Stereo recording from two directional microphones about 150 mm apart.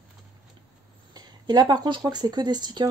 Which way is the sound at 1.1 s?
30° right (ahead or behind).